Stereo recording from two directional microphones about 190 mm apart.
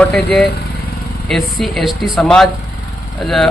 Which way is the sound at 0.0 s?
Centre (ahead or behind).